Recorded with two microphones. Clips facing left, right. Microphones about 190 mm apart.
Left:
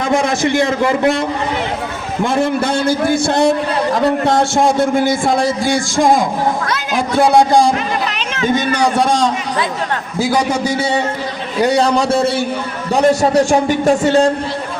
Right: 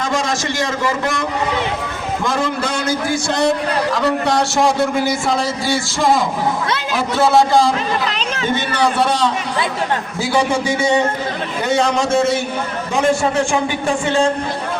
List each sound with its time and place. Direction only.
0.1 s a man's voice: 60° left (ahead or behind)
2.2 s a man's voice: 55° left (ahead or behind)
9.0 s a man's voice: 45° left (ahead or behind)